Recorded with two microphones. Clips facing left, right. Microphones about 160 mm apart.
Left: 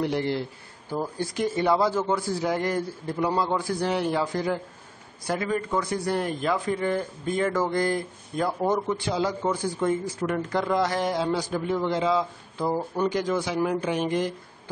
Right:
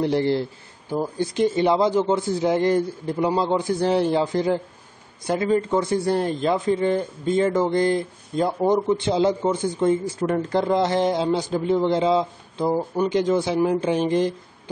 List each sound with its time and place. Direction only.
0.0 s a man's voice: 30° right (ahead or behind)
0.8 s speech: 20° right (ahead or behind)
13.2 s speech: 25° right (ahead or behind)